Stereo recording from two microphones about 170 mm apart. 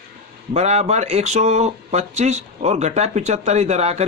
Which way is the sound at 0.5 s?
40° right (ahead or behind).